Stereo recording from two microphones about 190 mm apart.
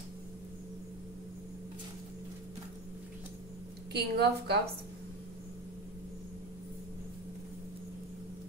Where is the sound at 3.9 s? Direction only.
60° right (ahead or behind).